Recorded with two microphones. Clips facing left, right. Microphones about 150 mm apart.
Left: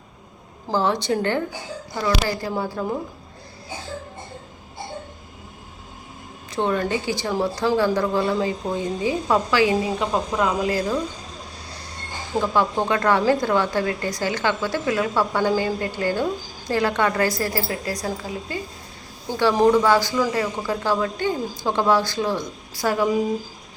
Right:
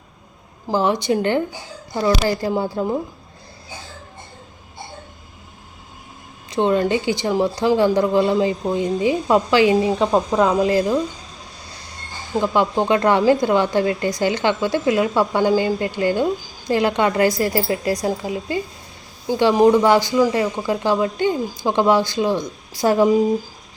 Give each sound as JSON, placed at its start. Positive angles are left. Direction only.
{"t": 0.7, "sound": "a woman's voice", "side_deg": -15}
{"t": 2.0, "sound": "a woman's voice", "side_deg": -30}
{"t": 6.5, "sound": "a woman's voice", "side_deg": -20}
{"t": 12.4, "sound": "a woman's voice", "side_deg": -20}